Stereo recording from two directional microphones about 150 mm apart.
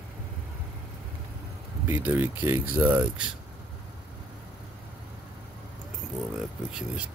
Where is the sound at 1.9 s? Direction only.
15° right (ahead or behind).